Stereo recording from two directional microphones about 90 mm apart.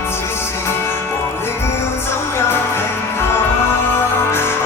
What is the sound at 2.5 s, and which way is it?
Music, 25° left (ahead or behind).